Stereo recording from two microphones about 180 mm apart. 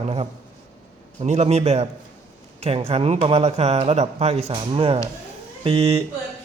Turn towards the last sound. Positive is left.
turn(degrees=-30)  # may be behind; listen again after turning